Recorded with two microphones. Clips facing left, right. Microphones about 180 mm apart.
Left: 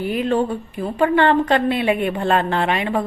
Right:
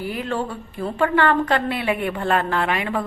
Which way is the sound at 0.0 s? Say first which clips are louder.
Left 6 dB; 20° left (ahead or behind).